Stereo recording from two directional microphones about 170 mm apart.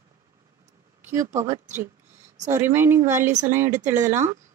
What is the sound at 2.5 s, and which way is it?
Speech, 15° right (ahead or behind).